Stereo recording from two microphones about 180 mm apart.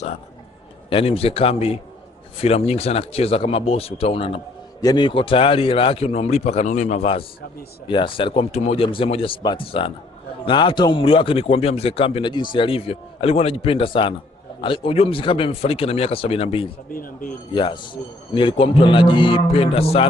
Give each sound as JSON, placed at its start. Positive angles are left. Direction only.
{"t": 0.9, "sound": "a man's voice", "side_deg": 30}
{"t": 16.9, "sound": "speech", "side_deg": 50}
{"t": 17.5, "sound": "a man's voice", "side_deg": 25}